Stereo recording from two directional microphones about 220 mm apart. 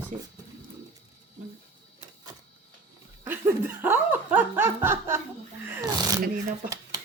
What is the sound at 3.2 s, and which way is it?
Snicker, 10° right (ahead or behind).